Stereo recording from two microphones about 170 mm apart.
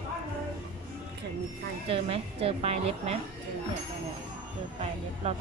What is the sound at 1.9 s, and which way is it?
A woman's voice, 35° right (ahead or behind).